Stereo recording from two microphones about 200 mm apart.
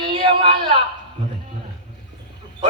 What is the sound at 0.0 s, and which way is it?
Speech, 25° right (ahead or behind).